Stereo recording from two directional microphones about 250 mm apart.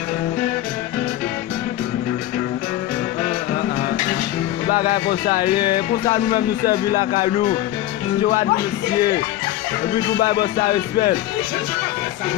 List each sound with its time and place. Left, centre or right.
4.7 s speech: left
5.5 s speech: centre
6.1 s speech: left
10.2 s speech: left